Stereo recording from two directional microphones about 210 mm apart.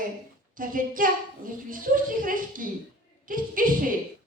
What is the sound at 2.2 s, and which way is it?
A woman's voice, 40° right (ahead or behind).